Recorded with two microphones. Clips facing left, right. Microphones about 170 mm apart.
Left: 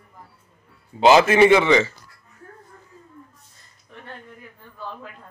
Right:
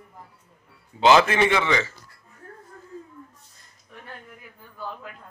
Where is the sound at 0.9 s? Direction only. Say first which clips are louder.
Left 3 dB; 40° left (ahead or behind).